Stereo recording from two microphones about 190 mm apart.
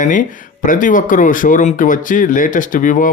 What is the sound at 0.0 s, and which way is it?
Speech, 45° left (ahead or behind).